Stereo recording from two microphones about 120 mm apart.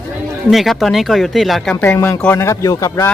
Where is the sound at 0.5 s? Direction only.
Centre (ahead or behind).